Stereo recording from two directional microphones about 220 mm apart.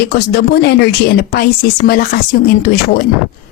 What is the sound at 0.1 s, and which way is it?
A woman's voice, 45° left (ahead or behind).